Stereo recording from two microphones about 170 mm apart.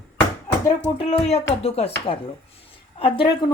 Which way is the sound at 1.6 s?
35° left (ahead or behind).